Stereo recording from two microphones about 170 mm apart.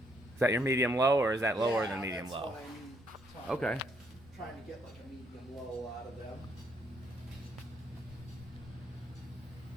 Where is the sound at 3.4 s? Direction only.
5° left (ahead or behind).